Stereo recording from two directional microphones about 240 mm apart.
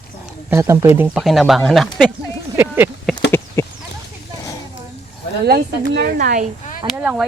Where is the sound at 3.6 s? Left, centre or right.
Centre.